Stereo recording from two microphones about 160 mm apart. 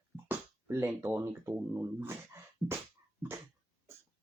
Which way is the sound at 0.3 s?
15° right (ahead or behind).